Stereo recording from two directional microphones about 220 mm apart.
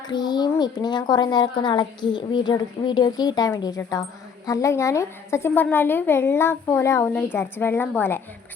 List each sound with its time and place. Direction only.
0.1 s a woman's voice: 20° left (ahead or behind)